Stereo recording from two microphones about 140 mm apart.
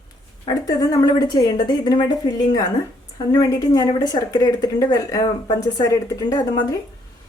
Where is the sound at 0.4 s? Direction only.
25° left (ahead or behind).